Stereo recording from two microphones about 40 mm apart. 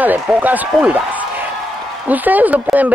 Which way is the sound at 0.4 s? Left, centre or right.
Right.